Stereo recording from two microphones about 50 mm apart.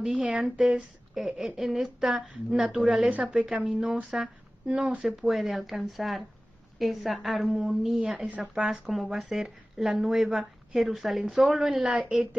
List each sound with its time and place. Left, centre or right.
0.0 s a woman's voice: centre
3.4 s a woman's voice: right